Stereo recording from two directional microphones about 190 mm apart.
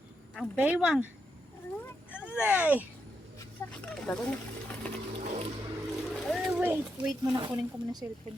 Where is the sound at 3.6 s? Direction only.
10° left (ahead or behind).